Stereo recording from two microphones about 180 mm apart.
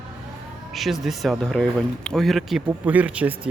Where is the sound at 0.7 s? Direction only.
Centre (ahead or behind).